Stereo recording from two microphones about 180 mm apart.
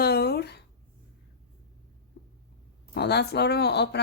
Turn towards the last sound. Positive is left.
turn(degrees=70)  # may be behind; listen again after turning